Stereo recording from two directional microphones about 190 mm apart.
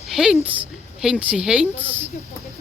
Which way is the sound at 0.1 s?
Centre (ahead or behind).